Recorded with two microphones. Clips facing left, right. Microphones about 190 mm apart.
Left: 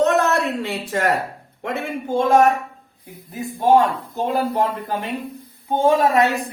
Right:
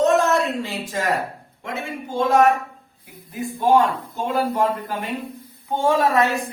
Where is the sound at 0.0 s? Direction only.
65° left (ahead or behind).